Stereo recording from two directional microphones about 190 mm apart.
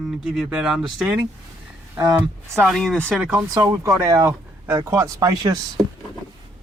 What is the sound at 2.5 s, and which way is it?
Speech, centre (ahead or behind).